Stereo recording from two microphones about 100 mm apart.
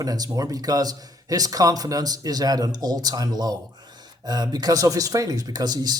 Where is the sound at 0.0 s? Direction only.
40° right (ahead or behind).